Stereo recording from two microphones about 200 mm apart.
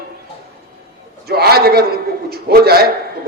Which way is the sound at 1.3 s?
50° right (ahead or behind).